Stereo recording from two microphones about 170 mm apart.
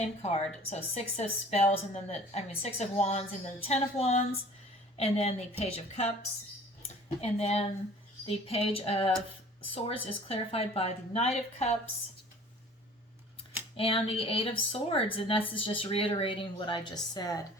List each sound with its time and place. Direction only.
0.0 s a woman's voice: 40° left (ahead or behind)
13.7 s a woman's voice: 35° left (ahead or behind)